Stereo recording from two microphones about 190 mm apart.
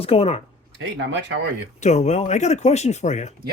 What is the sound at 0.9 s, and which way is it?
Speech, 70° right (ahead or behind).